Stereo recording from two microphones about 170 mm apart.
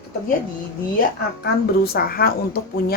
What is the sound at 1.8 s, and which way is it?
Speech, 65° left (ahead or behind).